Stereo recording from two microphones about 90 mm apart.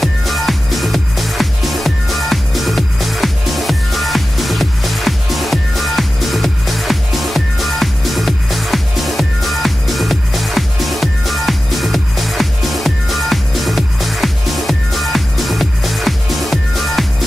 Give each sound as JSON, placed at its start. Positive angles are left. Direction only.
{"t": 0.0, "sound": "music", "side_deg": 0}